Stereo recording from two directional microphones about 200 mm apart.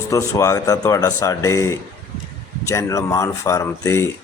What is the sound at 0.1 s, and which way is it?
Speech, 15° left (ahead or behind).